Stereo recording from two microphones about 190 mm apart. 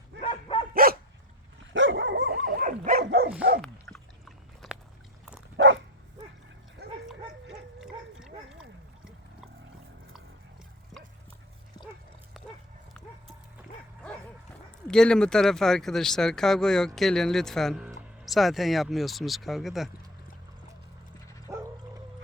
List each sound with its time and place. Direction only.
0.2 s dog: 30° left (ahead or behind)
0.7 s dog: 50° right (ahead or behind)
1.7 s dog: 75° right (ahead or behind)
2.4 s dog: 45° right (ahead or behind)
3.6 s dog: 5° left (ahead or behind)
5.5 s bow-wow: 75° right (ahead or behind)
6.8 s dog: 60° right (ahead or behind)
7.8 s dog: 5° right (ahead or behind)
14.8 s speech: 5° left (ahead or behind)
21.5 s bow-wow: 15° right (ahead or behind)